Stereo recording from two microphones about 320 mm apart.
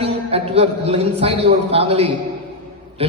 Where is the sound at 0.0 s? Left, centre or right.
Centre.